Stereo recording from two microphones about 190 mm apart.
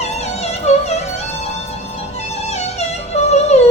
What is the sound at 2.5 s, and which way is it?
Music, 35° left (ahead or behind).